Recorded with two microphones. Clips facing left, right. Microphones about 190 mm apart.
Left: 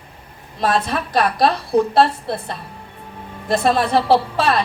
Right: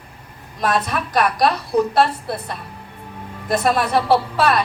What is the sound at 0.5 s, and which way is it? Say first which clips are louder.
A woman's voice: left 1 dB; 30° left (ahead or behind).